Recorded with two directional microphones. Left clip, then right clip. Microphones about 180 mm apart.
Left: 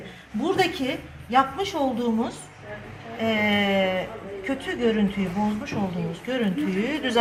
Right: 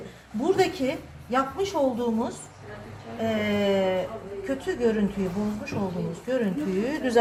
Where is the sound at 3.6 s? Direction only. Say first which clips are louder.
Left 1 dB; 25° right (ahead or behind).